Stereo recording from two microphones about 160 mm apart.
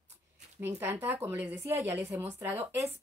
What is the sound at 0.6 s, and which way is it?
Speech, 15° right (ahead or behind).